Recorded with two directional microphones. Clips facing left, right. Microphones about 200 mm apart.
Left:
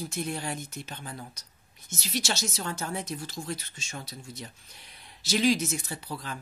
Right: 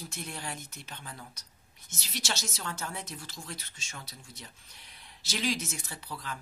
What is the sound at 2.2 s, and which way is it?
Speech, 40° left (ahead or behind).